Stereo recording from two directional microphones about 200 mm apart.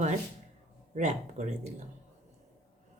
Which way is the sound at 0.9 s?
35° right (ahead or behind).